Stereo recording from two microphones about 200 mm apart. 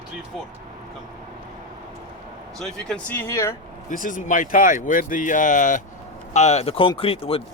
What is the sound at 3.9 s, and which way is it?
Speech, 40° left (ahead or behind).